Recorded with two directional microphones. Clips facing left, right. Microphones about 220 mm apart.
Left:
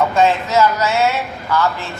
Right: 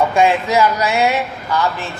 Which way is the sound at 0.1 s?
15° right (ahead or behind).